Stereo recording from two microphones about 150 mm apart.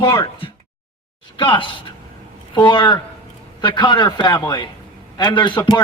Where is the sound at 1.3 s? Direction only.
35° left (ahead or behind).